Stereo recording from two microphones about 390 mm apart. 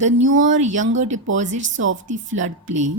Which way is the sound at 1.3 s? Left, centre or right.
Centre.